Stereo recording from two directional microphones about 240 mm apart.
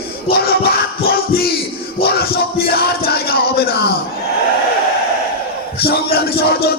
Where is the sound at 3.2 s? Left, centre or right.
Left.